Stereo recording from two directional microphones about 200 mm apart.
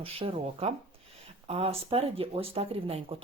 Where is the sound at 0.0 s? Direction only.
30° right (ahead or behind).